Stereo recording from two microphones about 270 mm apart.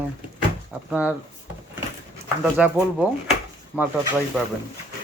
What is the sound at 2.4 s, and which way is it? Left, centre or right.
Speech, centre.